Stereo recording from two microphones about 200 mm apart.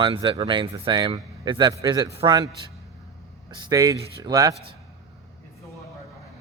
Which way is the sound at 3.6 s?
15° right (ahead or behind).